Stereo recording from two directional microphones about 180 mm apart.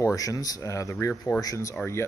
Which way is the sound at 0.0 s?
20° left (ahead or behind).